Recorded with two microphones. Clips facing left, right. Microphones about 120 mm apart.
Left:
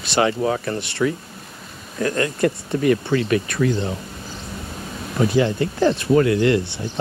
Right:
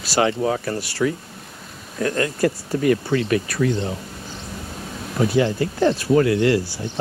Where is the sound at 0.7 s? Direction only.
25° left (ahead or behind).